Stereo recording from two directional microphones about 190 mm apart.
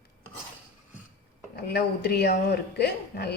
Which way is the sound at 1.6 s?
55° left (ahead or behind).